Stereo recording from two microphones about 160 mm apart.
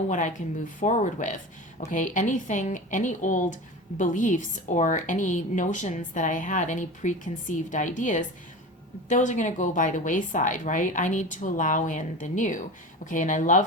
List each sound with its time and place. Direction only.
0.1 s a woman's voice: 55° left (ahead or behind)